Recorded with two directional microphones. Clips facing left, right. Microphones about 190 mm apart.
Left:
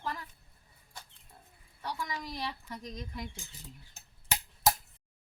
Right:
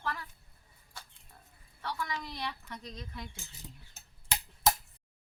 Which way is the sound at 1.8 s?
15° left (ahead or behind).